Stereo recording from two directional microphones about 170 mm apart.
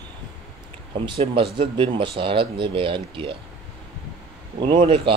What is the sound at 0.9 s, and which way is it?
Speech, 35° right (ahead or behind).